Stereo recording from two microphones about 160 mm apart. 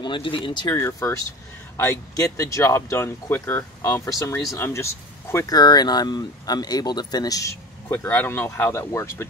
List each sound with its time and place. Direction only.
0.0 s speech: 30° left (ahead or behind)
0.7 s speech: 15° left (ahead or behind)